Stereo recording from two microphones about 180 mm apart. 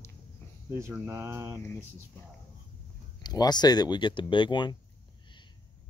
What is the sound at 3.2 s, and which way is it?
Speech, 25° left (ahead or behind).